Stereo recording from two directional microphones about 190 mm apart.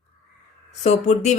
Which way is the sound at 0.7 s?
40° left (ahead or behind).